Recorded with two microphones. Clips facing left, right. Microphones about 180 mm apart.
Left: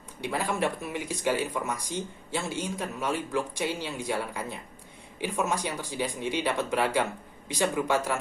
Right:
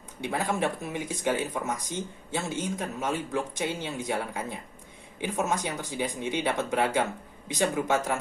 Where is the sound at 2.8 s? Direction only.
20° right (ahead or behind).